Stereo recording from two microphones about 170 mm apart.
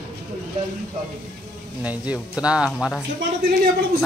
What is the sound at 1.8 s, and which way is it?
Speech, 10° right (ahead or behind).